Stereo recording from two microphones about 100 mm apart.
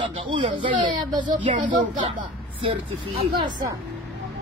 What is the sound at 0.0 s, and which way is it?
Speech, 55° right (ahead or behind).